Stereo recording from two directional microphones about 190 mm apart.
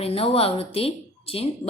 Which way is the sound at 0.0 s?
30° left (ahead or behind).